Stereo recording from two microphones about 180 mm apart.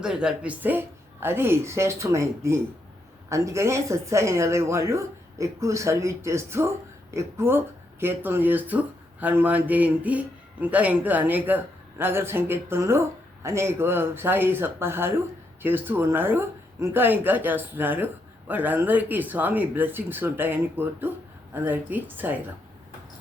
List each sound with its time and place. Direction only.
0.0 s a man's voice: 5° right (ahead or behind)